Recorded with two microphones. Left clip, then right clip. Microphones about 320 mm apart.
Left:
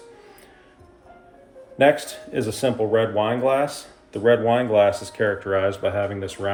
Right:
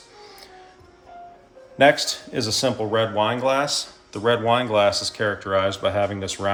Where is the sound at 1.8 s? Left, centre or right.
Right.